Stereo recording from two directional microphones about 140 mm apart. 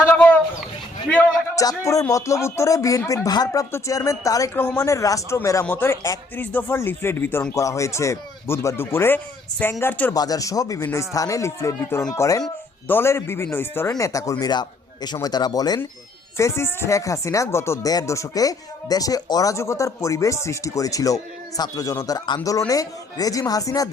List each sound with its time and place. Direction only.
0.1 s speech: 10° left (ahead or behind)
1.5 s speech: 25° left (ahead or behind)
16.4 s speech: 20° left (ahead or behind)